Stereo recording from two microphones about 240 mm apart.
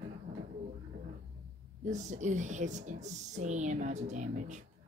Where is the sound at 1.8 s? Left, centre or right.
Right.